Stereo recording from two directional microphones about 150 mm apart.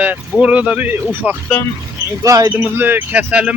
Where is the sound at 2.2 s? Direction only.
20° right (ahead or behind).